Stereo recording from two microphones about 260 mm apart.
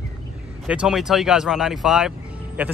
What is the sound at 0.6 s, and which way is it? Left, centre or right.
Speech, centre.